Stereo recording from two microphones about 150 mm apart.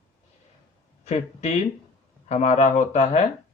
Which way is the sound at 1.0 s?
50° left (ahead or behind).